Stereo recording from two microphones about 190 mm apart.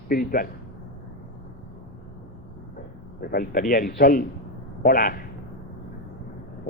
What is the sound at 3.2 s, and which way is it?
A man's voice, 50° left (ahead or behind).